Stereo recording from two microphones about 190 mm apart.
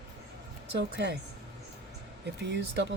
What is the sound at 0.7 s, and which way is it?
Speech, 65° right (ahead or behind).